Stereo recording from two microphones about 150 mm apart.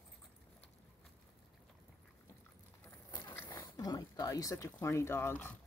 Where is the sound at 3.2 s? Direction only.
15° left (ahead or behind).